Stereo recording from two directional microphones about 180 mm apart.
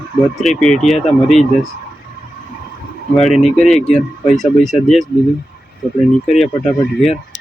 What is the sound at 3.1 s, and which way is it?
Speech, centre (ahead or behind).